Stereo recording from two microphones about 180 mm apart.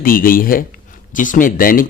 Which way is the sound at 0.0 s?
50° left (ahead or behind).